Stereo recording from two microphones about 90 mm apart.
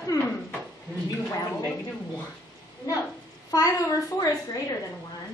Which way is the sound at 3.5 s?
40° left (ahead or behind).